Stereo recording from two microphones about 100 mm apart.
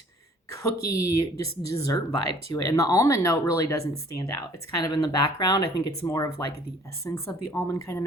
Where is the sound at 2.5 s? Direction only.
35° left (ahead or behind).